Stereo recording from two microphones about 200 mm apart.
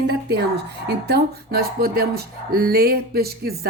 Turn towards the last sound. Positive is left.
turn(degrees=-50)  # may be behind; listen again after turning